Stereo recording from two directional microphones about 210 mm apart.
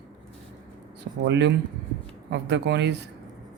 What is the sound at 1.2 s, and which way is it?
Speech, 55° right (ahead or behind).